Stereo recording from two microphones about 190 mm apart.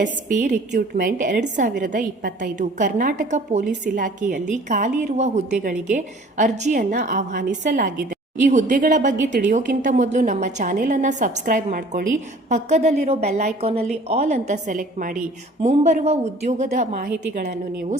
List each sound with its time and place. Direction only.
0.0 s a woman's voice: 45° right (ahead or behind)